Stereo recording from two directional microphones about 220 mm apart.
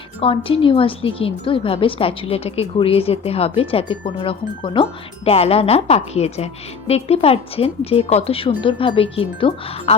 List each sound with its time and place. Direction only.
0.2 s a woman's voice: 25° left (ahead or behind)